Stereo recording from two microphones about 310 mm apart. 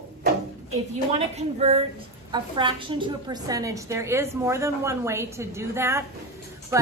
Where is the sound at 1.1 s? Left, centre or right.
Centre.